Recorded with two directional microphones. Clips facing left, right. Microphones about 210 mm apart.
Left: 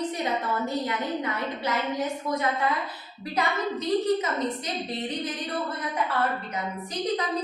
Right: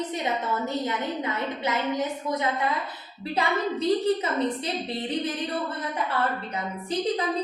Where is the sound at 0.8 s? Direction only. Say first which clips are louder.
Even; 20° right (ahead or behind).